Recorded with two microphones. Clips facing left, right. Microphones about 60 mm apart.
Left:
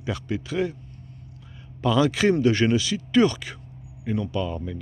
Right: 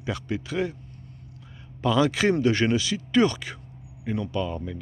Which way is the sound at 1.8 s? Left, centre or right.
Right.